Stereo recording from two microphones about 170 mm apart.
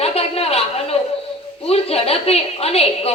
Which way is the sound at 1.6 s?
35° left (ahead or behind).